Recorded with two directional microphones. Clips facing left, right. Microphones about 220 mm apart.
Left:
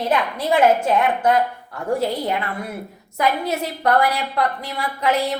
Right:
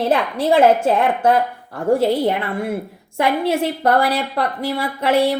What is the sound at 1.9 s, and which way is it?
A woman's voice, 30° right (ahead or behind).